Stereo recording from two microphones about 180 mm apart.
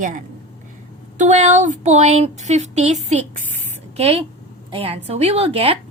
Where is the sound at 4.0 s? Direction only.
35° right (ahead or behind).